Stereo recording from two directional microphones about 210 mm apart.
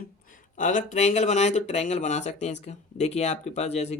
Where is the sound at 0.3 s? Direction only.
40° left (ahead or behind).